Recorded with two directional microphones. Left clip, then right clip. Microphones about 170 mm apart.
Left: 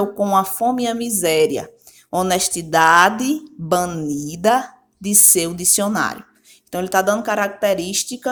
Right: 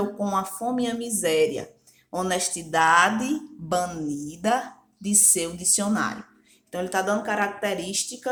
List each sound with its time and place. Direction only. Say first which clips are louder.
0.2 s a woman's voice: left 10 dB; 50° left (ahead or behind)